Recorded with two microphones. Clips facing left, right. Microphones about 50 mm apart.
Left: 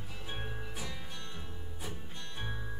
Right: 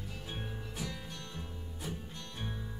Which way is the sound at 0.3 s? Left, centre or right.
Centre.